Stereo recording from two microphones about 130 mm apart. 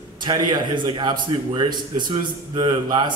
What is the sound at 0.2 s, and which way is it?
A man's voice, 35° right (ahead or behind).